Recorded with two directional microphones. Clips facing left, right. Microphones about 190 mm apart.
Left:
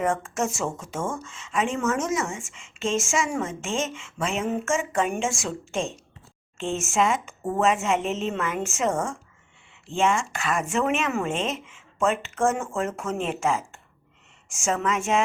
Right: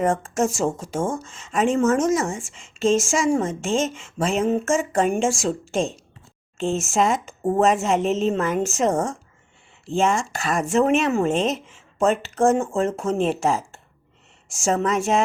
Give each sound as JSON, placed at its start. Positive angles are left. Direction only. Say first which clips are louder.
{"t": 0.0, "sound": "speech", "louder": "right 4 dB", "side_deg": -35}